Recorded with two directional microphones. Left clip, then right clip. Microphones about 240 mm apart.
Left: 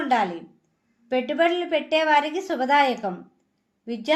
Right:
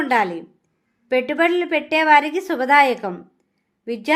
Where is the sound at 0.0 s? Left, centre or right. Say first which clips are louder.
Right 4 dB; right.